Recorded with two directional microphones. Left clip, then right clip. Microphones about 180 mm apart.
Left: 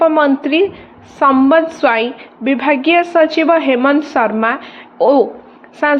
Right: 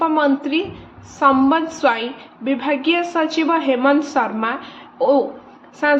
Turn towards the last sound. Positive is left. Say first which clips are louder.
# left 3 dB
turn(degrees=40)  # may be behind; listen again after turning